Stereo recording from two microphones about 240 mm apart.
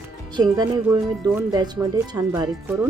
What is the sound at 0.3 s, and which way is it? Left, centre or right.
Speech, centre.